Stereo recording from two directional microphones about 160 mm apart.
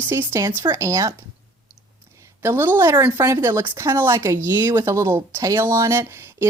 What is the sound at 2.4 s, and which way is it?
Speech, 15° right (ahead or behind).